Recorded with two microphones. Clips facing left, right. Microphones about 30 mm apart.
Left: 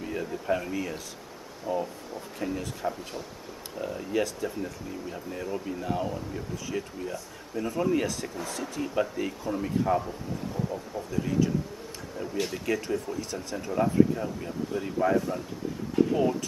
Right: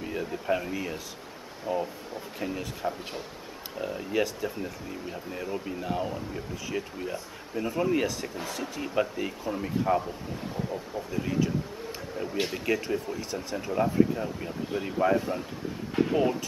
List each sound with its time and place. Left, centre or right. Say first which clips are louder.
0.0 s speech: even; centre